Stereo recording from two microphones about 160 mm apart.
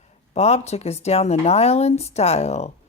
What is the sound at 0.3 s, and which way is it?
Speech, 45° left (ahead or behind).